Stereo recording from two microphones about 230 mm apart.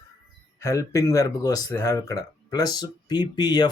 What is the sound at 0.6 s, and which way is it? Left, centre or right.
Speech, centre.